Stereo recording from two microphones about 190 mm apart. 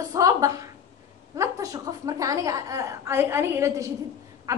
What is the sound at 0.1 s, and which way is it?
A woman's voice, 20° right (ahead or behind).